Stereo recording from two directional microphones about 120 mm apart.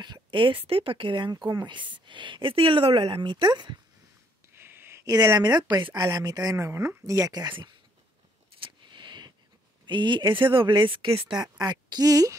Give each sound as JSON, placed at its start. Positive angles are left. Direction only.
{"t": 0.0, "sound": "speech", "side_deg": -40}
{"t": 4.6, "sound": "a sound", "side_deg": -20}
{"t": 5.1, "sound": "speech", "side_deg": -35}
{"t": 8.5, "sound": "a sound", "side_deg": -45}
{"t": 9.8, "sound": "speech", "side_deg": -40}
{"t": 11.2, "sound": "speech", "side_deg": -5}
{"t": 11.5, "sound": "speech", "side_deg": -35}